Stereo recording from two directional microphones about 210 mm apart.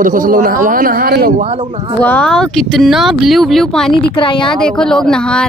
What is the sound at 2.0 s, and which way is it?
Speech, 5° left (ahead or behind).